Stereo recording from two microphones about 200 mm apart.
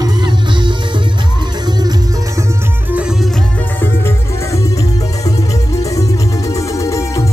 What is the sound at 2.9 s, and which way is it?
Music, 5° right (ahead or behind).